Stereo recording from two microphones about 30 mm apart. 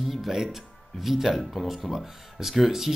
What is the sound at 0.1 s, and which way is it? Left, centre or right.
Speech, centre.